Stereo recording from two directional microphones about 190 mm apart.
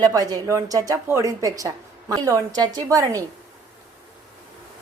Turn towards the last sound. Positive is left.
turn(degrees=-20)  # may be behind; listen again after turning